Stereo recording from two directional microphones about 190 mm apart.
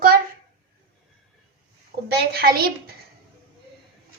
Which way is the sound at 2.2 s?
55° right (ahead or behind).